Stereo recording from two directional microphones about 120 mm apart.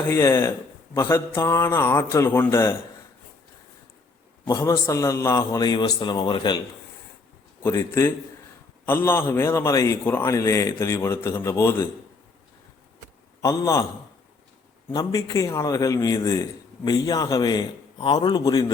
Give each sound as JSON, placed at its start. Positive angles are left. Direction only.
{"t": 0.1, "sound": "a man's voice", "side_deg": 25}
{"t": 4.4, "sound": "a man's voice", "side_deg": 30}
{"t": 7.6, "sound": "a man's voice", "side_deg": 25}
{"t": 13.4, "sound": "a man's voice", "side_deg": 25}
{"t": 14.9, "sound": "a man's voice", "side_deg": 30}